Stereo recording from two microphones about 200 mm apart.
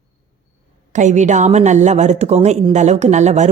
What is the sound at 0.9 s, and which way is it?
Speech, 35° right (ahead or behind).